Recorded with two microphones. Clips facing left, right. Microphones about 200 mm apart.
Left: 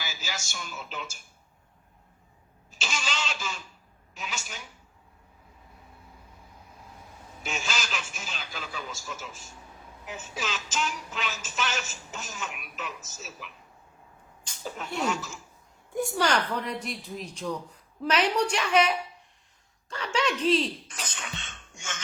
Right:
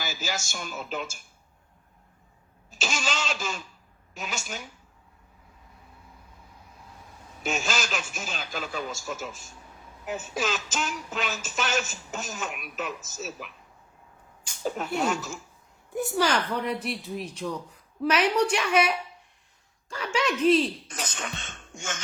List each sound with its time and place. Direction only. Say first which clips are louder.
0.0 s speech: right 5 dB; 45° right (ahead or behind)
2.6 s music: right 4 dB; 45° right (ahead or behind)
7.4 s music: right 5 dB; 45° right (ahead or behind)
14.5 s a woman's voice: even; 10° right (ahead or behind)
15.0 s music: even; 50° right (ahead or behind)
16.0 s a woman's voice: right 1 dB; centre (ahead or behind)
19.9 s a woman's voice: right 1 dB; 10° right (ahead or behind)
20.8 s cough: right 5 dB; 45° right (ahead or behind)